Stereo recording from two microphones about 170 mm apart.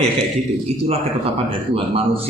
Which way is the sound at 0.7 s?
40° right (ahead or behind).